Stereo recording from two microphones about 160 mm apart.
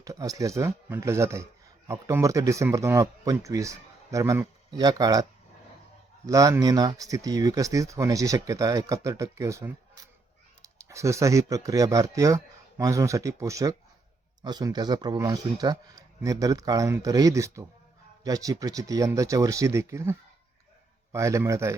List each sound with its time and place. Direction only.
0.0 s speech: 20° right (ahead or behind)
6.2 s speech: 20° right (ahead or behind)